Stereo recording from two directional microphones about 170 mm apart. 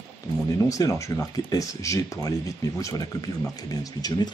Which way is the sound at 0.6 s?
20° left (ahead or behind).